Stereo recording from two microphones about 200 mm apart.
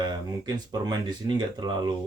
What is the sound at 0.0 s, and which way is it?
Speech, 20° right (ahead or behind).